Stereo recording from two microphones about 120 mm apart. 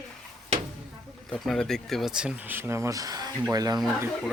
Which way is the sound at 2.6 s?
20° right (ahead or behind).